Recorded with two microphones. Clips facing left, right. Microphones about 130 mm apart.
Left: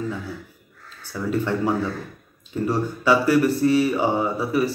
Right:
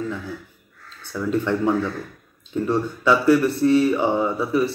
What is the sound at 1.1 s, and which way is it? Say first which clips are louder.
Speech: right 2 dB; 10° left (ahead or behind).